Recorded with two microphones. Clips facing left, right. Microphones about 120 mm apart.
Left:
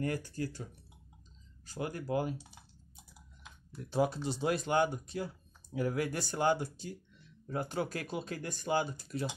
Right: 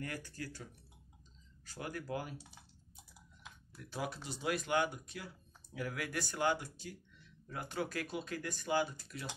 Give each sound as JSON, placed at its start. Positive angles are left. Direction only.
{"t": 0.0, "sound": "speech", "side_deg": 30}
{"t": 1.7, "sound": "speech", "side_deg": 25}
{"t": 3.7, "sound": "speech", "side_deg": 30}